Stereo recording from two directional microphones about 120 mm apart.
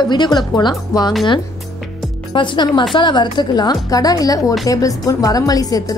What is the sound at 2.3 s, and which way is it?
A woman's voice, 40° left (ahead or behind).